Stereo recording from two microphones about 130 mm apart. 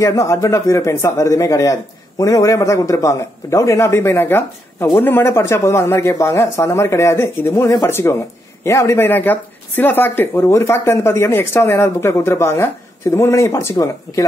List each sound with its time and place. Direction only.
0.0 s speech: 25° left (ahead or behind)